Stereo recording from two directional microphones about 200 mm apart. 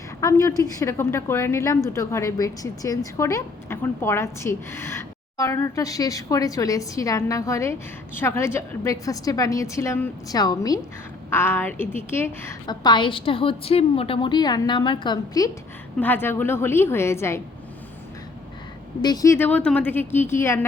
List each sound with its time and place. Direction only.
0.2 s a woman's voice: 15° left (ahead or behind)
16.0 s a woman's voice: 10° left (ahead or behind)
19.0 s a woman's voice: 20° left (ahead or behind)